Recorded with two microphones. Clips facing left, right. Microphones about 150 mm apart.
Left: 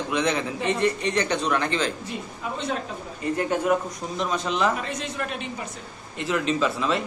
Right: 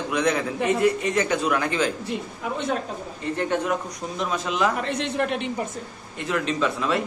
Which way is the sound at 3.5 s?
Centre (ahead or behind).